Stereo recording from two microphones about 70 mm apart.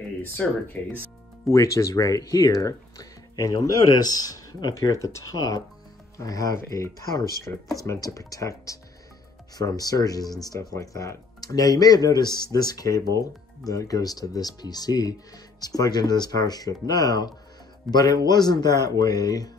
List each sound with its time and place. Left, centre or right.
0.4 s speech: centre
1.5 s speech: left
9.6 s speech: left
12.4 s speech: left
17.9 s a man's voice: centre
18.2 s speech: left